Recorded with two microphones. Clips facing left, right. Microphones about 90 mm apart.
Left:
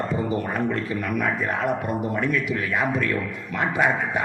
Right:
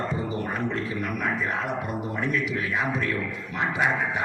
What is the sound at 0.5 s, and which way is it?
Speech, 50° left (ahead or behind).